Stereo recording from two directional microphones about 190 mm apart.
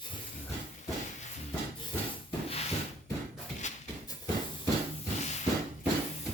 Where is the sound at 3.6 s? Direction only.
40° left (ahead or behind).